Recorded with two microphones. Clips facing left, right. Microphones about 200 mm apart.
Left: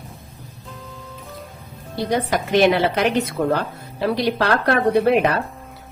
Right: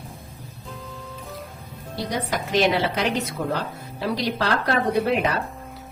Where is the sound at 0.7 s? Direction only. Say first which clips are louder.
Right 1 dB; centre (ahead or behind).